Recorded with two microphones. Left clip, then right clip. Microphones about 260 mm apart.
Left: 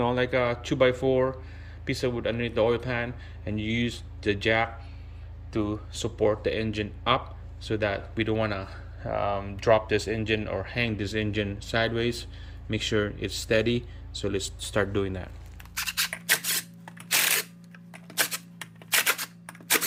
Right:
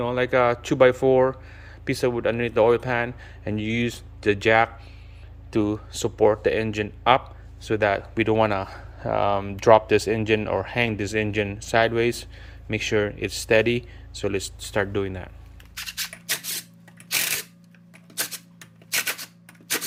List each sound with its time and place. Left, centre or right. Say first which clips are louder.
0.0 s speech: right 4 dB; centre
15.7 s a sound: left 3 dB; centre
18.2 s typewriter: left 3 dB; centre